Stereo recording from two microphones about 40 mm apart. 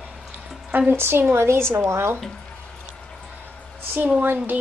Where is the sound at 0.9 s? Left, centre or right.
Right.